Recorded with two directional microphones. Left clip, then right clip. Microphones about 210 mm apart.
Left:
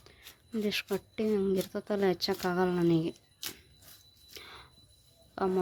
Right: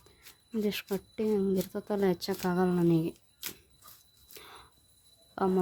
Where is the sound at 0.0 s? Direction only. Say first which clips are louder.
Left 3 dB; 5° right (ahead or behind).